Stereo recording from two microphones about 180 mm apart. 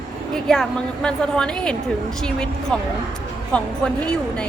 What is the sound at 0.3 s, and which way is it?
A woman's voice, centre (ahead or behind).